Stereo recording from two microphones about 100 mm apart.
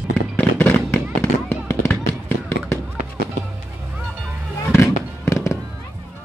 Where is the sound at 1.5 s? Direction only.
25° left (ahead or behind).